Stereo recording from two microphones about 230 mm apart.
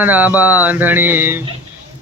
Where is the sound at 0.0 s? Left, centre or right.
Centre.